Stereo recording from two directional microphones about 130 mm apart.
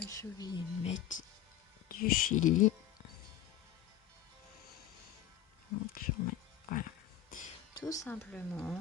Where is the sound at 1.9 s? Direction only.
85° left.